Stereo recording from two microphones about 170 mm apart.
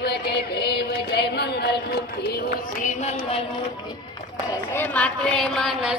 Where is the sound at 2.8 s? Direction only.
40° left (ahead or behind).